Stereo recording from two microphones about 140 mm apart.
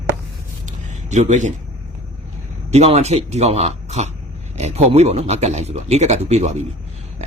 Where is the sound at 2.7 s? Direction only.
50° right (ahead or behind).